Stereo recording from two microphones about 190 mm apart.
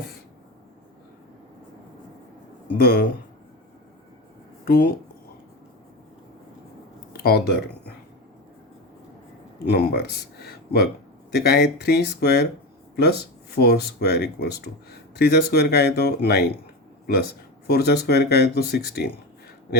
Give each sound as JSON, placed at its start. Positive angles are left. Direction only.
{"t": 2.7, "sound": "speech", "side_deg": 55}
{"t": 4.6, "sound": "speech", "side_deg": 50}
{"t": 7.1, "sound": "speech", "side_deg": 55}
{"t": 9.6, "sound": "speech", "side_deg": 55}
{"t": 13.6, "sound": "speech", "side_deg": 60}
{"t": 17.7, "sound": "speech", "side_deg": 55}